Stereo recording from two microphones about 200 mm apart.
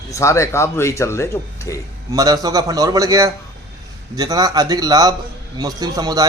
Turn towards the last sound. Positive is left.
turn(degrees=-20)  # may be behind; listen again after turning